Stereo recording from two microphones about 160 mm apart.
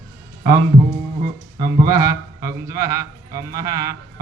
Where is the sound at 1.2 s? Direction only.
60° right (ahead or behind).